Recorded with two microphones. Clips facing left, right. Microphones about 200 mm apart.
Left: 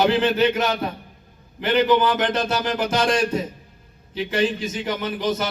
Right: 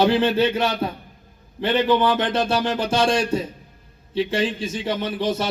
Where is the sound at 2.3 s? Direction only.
30° right (ahead or behind).